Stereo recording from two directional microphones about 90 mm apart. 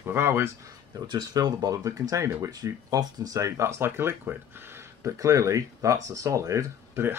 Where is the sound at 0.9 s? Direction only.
50° right (ahead or behind).